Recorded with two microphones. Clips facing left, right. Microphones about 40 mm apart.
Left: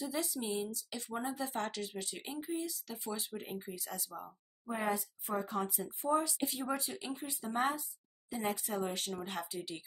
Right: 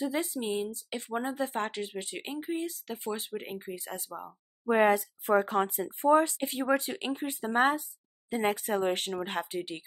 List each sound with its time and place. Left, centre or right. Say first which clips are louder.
0.0 s speech: right 6 dB; right
2.4 s speech: right 5 dB; right
4.6 s speech: right 12 dB; right